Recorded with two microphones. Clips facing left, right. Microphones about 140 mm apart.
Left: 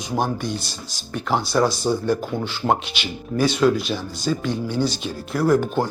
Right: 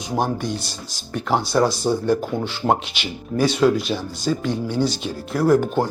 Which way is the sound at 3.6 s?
30° right (ahead or behind).